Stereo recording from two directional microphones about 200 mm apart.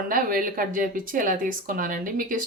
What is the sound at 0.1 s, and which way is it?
Speech, 45° right (ahead or behind).